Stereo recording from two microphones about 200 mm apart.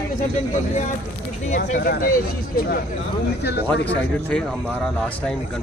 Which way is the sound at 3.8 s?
5° left (ahead or behind).